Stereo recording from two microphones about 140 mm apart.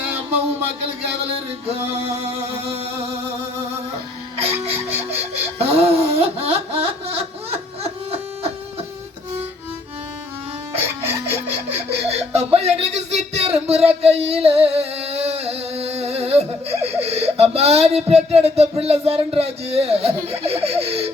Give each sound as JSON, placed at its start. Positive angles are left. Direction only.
{"t": 1.2, "sound": "music", "side_deg": -45}
{"t": 4.4, "sound": "music", "side_deg": -45}
{"t": 4.9, "sound": "laughter", "side_deg": -45}
{"t": 10.8, "sound": "music", "side_deg": -15}
{"t": 11.7, "sound": "speech", "side_deg": -50}
{"t": 18.8, "sound": "music", "side_deg": -45}